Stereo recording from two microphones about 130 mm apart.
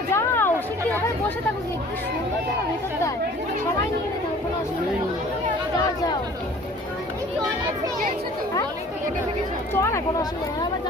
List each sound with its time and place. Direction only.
0.1 s chatter: 20° left (ahead or behind)
9.7 s speech: 20° left (ahead or behind)